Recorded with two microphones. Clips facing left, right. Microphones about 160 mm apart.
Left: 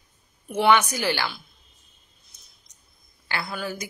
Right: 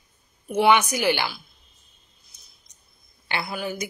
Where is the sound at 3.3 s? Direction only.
15° right (ahead or behind).